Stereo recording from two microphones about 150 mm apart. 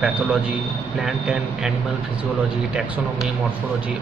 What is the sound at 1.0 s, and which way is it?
Speech, centre (ahead or behind).